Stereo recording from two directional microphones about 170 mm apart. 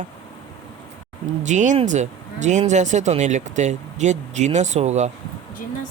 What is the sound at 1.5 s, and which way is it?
Speech, 45° right (ahead or behind).